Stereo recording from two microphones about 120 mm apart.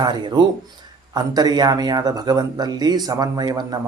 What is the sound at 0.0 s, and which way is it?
Speech, 35° right (ahead or behind).